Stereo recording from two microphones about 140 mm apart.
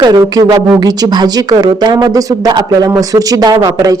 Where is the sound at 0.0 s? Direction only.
30° right (ahead or behind).